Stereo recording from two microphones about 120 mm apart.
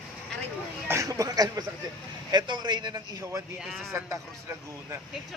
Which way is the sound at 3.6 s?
Centre (ahead or behind).